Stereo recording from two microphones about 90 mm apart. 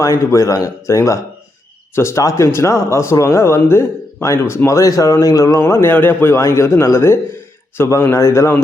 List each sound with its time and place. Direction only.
0.0 s speech: 35° left (ahead or behind)